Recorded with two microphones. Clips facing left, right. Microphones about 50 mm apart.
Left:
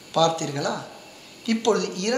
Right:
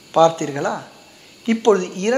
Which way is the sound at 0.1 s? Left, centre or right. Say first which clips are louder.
Right 7 dB; right.